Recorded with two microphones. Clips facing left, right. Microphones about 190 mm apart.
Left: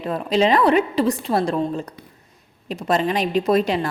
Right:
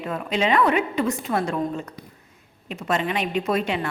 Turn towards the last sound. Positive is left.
turn(degrees=35)  # may be behind; listen again after turning